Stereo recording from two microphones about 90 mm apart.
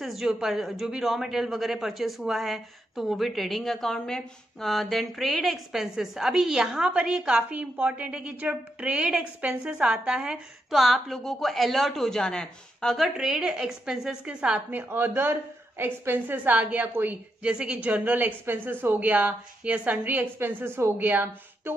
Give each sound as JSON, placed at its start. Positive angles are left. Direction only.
{"t": 0.0, "sound": "a woman's voice", "side_deg": 0}